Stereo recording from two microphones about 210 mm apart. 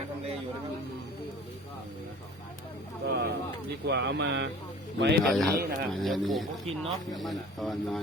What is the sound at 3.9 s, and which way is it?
Speech, 55° right (ahead or behind).